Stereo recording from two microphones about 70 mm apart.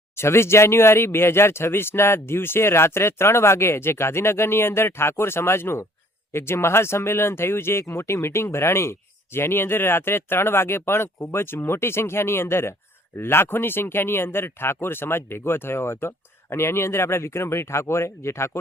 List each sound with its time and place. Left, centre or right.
0.2 s speech: left